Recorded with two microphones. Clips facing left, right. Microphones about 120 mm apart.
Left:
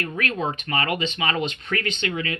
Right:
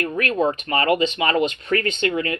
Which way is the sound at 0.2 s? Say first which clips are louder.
Right 6 dB; 40° right (ahead or behind).